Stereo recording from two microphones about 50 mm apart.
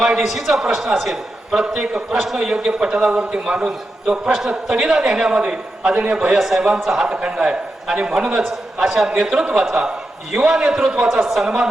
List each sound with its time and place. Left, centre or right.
0.0 s a man's voice: centre
0.3 s speech: centre
1.5 s a man's voice: centre
7.1 s a man's voice: right
11.2 s speech: centre
11.4 s a man's voice: centre